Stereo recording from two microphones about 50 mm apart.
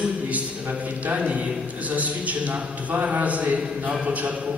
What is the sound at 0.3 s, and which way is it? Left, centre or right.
A man's voice, right.